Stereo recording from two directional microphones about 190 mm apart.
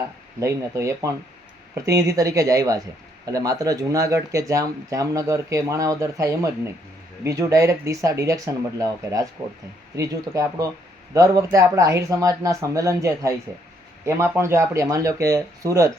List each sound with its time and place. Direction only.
0.3 s speech: 15° right (ahead or behind)